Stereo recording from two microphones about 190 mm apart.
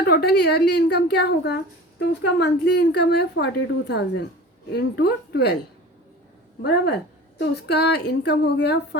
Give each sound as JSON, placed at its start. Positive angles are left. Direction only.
{"t": 0.0, "sound": "a woman's voice", "side_deg": 60}
{"t": 6.6, "sound": "a woman's voice", "side_deg": 60}